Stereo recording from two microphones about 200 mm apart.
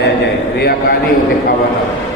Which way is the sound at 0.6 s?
50° left (ahead or behind).